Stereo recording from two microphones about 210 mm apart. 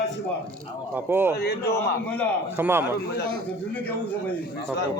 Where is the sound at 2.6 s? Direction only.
10° right (ahead or behind).